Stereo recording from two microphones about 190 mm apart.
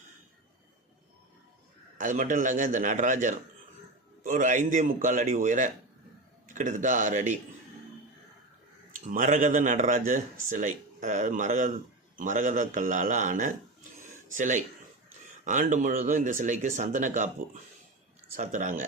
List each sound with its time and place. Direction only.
2.0 s a man's voice: 45° right (ahead or behind)
9.0 s a man's voice: 45° right (ahead or behind)